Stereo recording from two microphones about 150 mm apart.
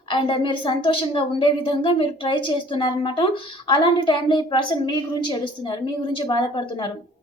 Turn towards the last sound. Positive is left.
turn(degrees=30)  # may be behind; listen again after turning